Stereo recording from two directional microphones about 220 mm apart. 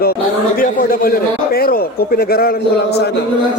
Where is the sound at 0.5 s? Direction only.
40° left (ahead or behind).